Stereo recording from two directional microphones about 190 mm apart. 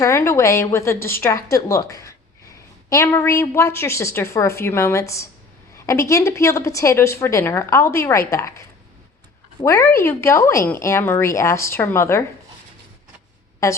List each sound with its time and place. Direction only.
0.0 s a woman's voice: 15° left (ahead or behind)
13.6 s a woman's voice: 15° left (ahead or behind)